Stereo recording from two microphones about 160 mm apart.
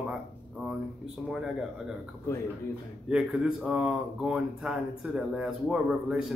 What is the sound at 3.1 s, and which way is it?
Speech, 5° right (ahead or behind).